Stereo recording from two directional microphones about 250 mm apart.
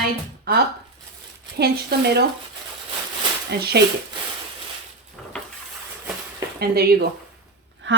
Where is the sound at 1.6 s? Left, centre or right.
Right.